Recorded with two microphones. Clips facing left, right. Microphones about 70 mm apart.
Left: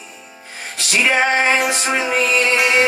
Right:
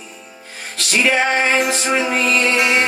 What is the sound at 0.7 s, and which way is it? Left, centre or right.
Music, centre.